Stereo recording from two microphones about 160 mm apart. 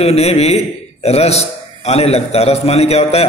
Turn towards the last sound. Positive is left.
turn(degrees=40)  # may be behind; listen again after turning